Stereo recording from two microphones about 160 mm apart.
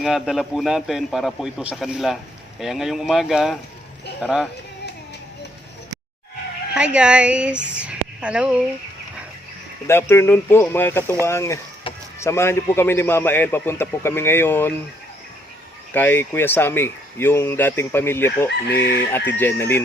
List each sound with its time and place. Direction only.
0.0 s a man's voice: centre (ahead or behind)
6.7 s speech: 5° right (ahead or behind)
9.8 s speech: 15° left (ahead or behind)
11.9 s a sound: 35° left (ahead or behind)
12.2 s speech: 15° left (ahead or behind)
15.9 s speech: 10° left (ahead or behind)